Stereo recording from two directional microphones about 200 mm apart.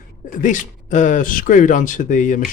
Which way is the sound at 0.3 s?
40° left (ahead or behind).